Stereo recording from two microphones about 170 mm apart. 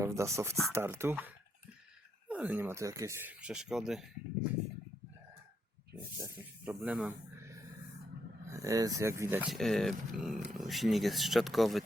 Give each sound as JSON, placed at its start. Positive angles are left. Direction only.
{"t": 0.0, "sound": "speech", "side_deg": -15}
{"t": 6.1, "sound": "speech", "side_deg": -15}
{"t": 7.3, "sound": "a sound", "side_deg": -15}
{"t": 8.4, "sound": "speech", "side_deg": -20}
{"t": 9.5, "sound": "speech", "side_deg": 0}